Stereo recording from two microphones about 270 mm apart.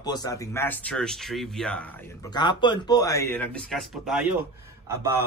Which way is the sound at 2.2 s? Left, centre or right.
Centre.